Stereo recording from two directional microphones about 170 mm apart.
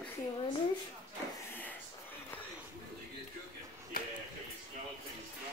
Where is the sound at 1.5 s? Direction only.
10° left (ahead or behind).